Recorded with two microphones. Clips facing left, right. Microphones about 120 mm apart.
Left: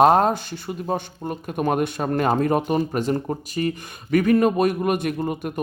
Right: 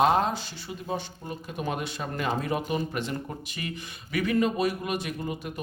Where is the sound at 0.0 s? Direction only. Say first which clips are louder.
Left 7 dB; 50° left (ahead or behind).